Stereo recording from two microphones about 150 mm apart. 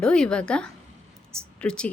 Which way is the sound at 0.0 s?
5° left (ahead or behind).